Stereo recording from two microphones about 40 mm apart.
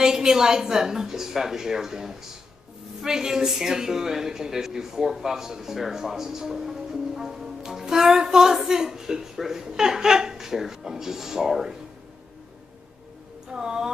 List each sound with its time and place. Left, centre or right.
0.0 s speech: centre
13.5 s speech: centre